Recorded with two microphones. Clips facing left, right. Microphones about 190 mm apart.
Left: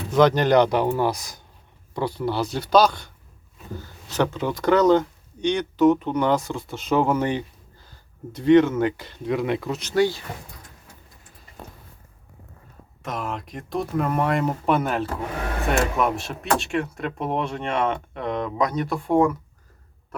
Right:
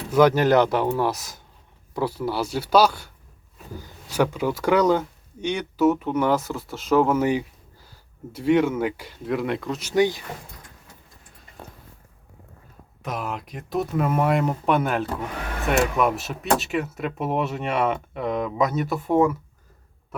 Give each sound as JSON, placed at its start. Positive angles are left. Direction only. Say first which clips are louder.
{"t": 0.1, "sound": "speech", "louder": "even", "side_deg": -10}
{"t": 9.8, "sound": "speech", "louder": "right 1 dB", "side_deg": -15}
{"t": 13.0, "sound": "speech", "louder": "even", "side_deg": 0}